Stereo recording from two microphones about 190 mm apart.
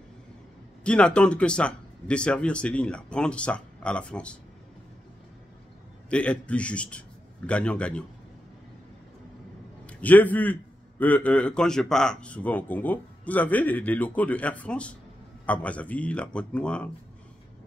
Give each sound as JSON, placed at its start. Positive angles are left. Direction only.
{"t": 0.8, "sound": "speech", "side_deg": 5}
{"t": 6.0, "sound": "a man's voice", "side_deg": 5}
{"t": 9.8, "sound": "a man's voice", "side_deg": 10}